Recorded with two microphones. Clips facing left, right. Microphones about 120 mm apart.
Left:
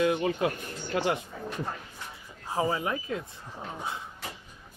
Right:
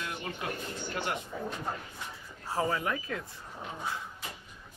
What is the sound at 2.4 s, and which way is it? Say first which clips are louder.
Speech: left 2 dB; 15° left (ahead or behind).